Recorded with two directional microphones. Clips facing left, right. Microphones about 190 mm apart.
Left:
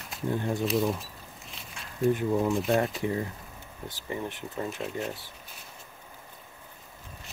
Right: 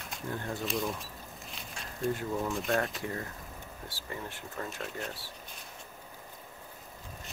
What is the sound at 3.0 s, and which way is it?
Speech, 20° left (ahead or behind).